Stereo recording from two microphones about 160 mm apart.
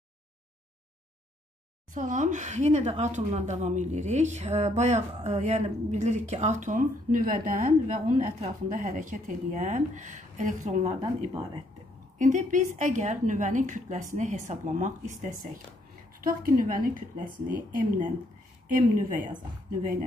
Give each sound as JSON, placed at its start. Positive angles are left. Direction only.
{"t": 2.0, "sound": "a woman's voice", "side_deg": -55}
{"t": 12.2, "sound": "a woman's voice", "side_deg": -50}